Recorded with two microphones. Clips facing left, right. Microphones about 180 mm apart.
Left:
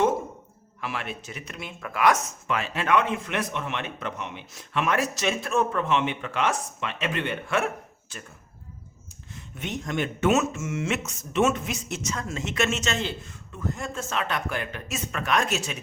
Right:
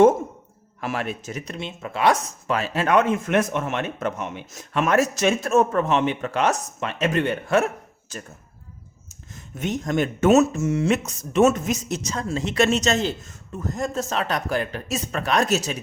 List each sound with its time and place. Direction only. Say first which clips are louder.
0.8 s speech: right 6 dB; 45° right (ahead or behind)
1.5 s speech: even; 25° right (ahead or behind)